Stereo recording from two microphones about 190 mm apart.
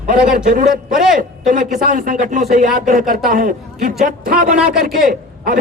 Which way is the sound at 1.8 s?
45° right (ahead or behind).